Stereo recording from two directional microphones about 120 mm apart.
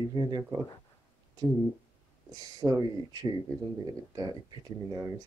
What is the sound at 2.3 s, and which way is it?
Speech, 30° right (ahead or behind).